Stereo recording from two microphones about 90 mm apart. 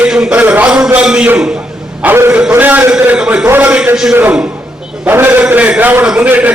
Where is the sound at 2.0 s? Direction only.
30° right (ahead or behind); by 3.4 s 10° right (ahead or behind).